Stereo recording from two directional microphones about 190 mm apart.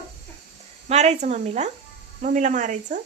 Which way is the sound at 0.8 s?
35° right (ahead or behind).